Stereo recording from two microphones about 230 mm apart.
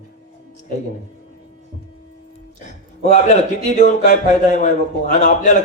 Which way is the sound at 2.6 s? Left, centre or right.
Left.